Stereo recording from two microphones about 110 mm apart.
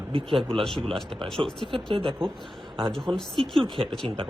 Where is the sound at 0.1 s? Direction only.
50° right (ahead or behind).